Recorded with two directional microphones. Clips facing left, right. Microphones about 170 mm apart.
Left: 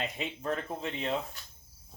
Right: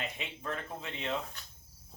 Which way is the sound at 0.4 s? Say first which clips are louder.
Left 5 dB; 35° left (ahead or behind).